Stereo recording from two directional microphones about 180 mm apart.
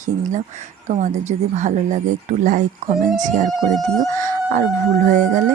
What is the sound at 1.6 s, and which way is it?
Speech, 40° right (ahead or behind).